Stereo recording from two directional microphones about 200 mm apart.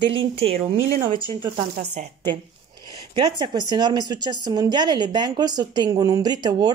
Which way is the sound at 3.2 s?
20° right (ahead or behind).